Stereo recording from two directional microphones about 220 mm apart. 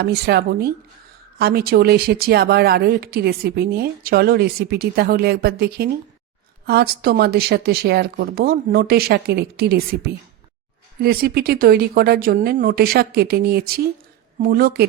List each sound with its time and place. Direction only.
0.0 s a woman's voice: 50° right (ahead or behind)